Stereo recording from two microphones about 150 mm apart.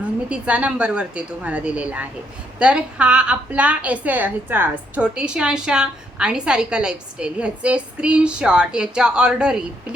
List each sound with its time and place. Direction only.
0.3 s a woman's voice: 10° right (ahead or behind)